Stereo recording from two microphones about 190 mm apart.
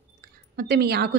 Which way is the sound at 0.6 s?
55° right (ahead or behind).